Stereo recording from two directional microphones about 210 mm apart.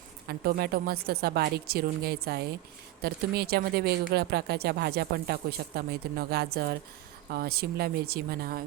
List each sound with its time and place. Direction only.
0.3 s speech: 45° right (ahead or behind)